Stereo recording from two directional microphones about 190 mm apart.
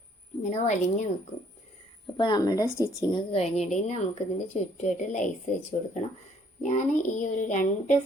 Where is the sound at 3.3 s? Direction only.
35° left (ahead or behind).